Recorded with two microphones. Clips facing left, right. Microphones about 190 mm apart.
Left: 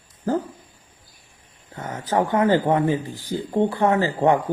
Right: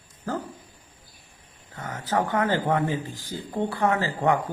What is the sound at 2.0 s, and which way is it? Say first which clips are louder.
Speech: left 5 dB; 15° left (ahead or behind).